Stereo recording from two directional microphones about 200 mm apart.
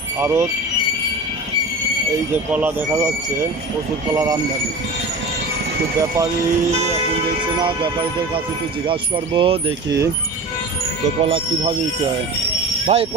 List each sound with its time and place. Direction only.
0.2 s speech: 10° right (ahead or behind)
2.3 s speech: 10° right (ahead or behind)
8.8 s mechanisms: 25° right (ahead or behind)
11.2 s mechanisms: 30° right (ahead or behind)
12.8 s speech: 30° right (ahead or behind)